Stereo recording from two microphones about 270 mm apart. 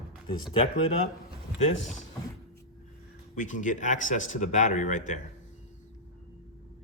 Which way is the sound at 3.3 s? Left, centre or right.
Left.